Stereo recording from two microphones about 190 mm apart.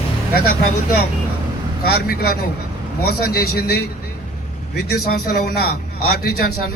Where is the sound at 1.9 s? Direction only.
55° left (ahead or behind).